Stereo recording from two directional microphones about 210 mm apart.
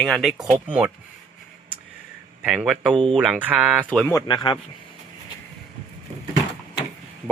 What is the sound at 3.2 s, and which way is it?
Speech, 5° right (ahead or behind).